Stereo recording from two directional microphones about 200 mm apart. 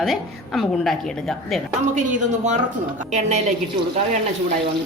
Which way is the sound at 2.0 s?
40° right (ahead or behind).